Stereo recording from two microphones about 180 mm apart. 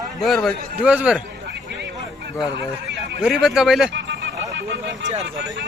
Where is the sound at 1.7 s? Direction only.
70° right (ahead or behind).